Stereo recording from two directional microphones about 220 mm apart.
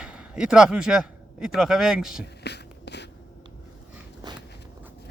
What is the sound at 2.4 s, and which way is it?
Beatboxing, 50° left (ahead or behind).